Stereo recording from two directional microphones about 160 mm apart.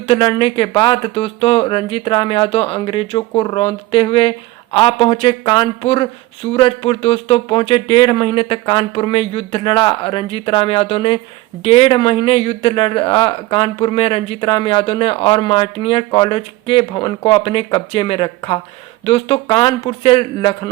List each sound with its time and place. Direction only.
0.1 s speech: 30° left (ahead or behind)